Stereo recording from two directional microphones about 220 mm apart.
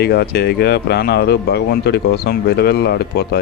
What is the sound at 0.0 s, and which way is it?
Speech, 45° left (ahead or behind).